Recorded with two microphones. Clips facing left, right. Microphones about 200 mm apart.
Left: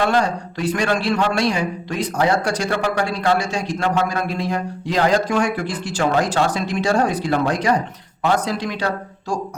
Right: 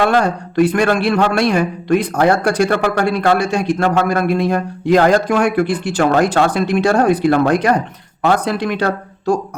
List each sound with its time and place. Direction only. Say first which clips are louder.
0.1 s a man's voice: right 4 dB; 55° right (ahead or behind)